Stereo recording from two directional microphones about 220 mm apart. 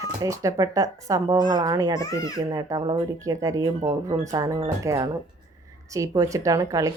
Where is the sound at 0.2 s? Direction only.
15° right (ahead or behind).